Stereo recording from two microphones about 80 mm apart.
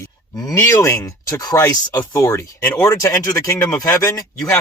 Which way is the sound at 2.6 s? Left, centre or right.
Centre.